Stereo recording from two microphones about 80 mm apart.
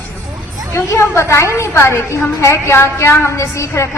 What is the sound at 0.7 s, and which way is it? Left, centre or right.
A woman's voice, left.